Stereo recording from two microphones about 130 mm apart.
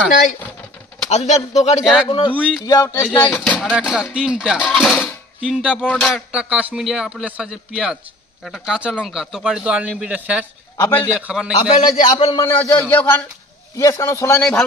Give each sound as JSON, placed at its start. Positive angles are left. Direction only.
{"t": 0.1, "sound": "speech", "side_deg": 75}
{"t": 1.1, "sound": "speech", "side_deg": 60}
{"t": 1.8, "sound": "speech", "side_deg": 0}
{"t": 2.0, "sound": "speech", "side_deg": 45}
{"t": 2.6, "sound": "a man's voice", "side_deg": 30}
{"t": 3.1, "sound": "speech", "side_deg": 10}
{"t": 3.6, "sound": "a man's voice", "side_deg": -5}
{"t": 4.6, "sound": "a sound", "side_deg": 0}
{"t": 5.7, "sound": "a man's voice", "side_deg": 5}
{"t": 10.8, "sound": "speech", "side_deg": 15}
{"t": 11.1, "sound": "speech", "side_deg": -5}
{"t": 11.9, "sound": "speech", "side_deg": 45}
{"t": 12.4, "sound": "speech", "side_deg": 20}
{"t": 13.7, "sound": "a man's voice", "side_deg": 25}